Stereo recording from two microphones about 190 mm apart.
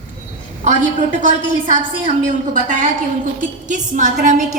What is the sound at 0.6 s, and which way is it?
A woman's voice, 40° right (ahead or behind).